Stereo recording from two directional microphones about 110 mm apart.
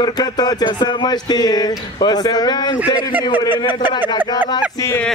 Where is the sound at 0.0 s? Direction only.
40° left (ahead or behind).